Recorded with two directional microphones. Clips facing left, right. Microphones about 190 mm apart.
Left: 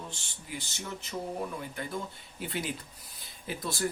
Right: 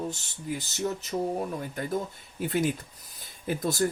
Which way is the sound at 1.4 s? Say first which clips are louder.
Right 4 dB; 45° right (ahead or behind).